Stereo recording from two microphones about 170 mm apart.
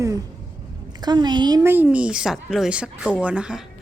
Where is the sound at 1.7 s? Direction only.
10° right (ahead or behind).